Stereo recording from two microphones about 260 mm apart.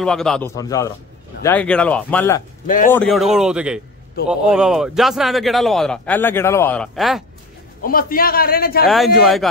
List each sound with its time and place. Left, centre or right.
0.0 s a man's voice: centre
0.6 s a man's voice: centre
2.6 s speech: left
2.9 s a man's voice: centre
7.8 s a man's voice: left
8.8 s a man's voice: centre